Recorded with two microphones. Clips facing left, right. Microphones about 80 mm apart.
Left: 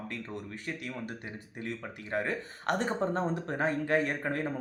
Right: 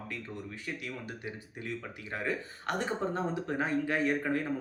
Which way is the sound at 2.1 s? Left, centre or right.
Left.